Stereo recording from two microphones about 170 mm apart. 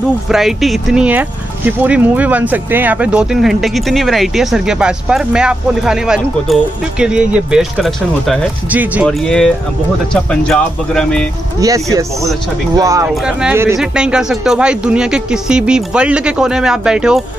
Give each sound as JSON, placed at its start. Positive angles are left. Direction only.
{"t": 0.3, "sound": "speech", "side_deg": 0}
{"t": 11.6, "sound": "speech", "side_deg": -20}
{"t": 13.1, "sound": "speech", "side_deg": -5}